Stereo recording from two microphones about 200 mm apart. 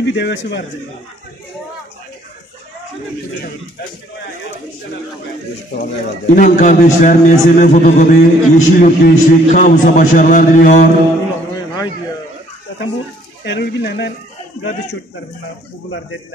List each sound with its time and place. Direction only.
0.0 s speech: 60° left (ahead or behind)
5.8 s a man's voice: 40° left (ahead or behind)
13.4 s speech: 55° left (ahead or behind)